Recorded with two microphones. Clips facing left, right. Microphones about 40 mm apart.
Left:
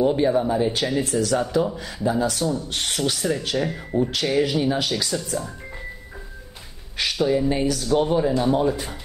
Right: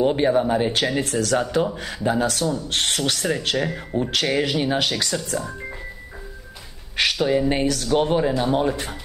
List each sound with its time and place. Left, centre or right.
0.0 s speech: right
4.1 s speech: right
7.0 s speech: right